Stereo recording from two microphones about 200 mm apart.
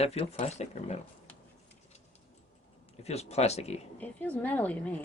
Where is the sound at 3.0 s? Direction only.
30° left (ahead or behind).